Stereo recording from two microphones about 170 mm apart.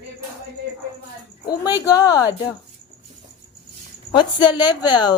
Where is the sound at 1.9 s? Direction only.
20° left (ahead or behind).